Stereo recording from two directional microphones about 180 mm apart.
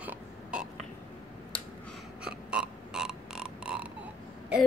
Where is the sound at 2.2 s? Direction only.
5° right (ahead or behind).